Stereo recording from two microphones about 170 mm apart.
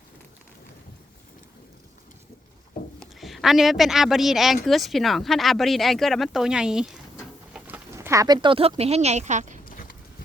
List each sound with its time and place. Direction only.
3.0 s speech: centre (ahead or behind)
7.9 s speech: 20° right (ahead or behind); by 9.6 s 45° right (ahead or behind)
9.6 s clip-clop: 55° left (ahead or behind)